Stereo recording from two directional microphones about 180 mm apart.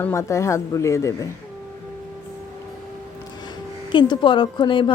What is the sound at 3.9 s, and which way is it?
Speech, 25° left (ahead or behind).